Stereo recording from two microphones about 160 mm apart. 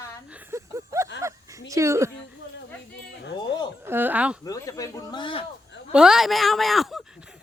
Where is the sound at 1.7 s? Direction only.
20° right (ahead or behind).